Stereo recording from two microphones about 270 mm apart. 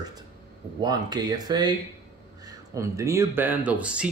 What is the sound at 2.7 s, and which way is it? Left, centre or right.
Speech, centre.